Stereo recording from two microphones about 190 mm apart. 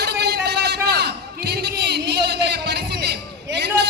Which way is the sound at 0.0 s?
60° right (ahead or behind).